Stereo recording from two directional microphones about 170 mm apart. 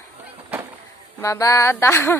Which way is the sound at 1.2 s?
20° left (ahead or behind).